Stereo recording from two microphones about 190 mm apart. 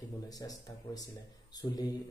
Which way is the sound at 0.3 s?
20° left (ahead or behind).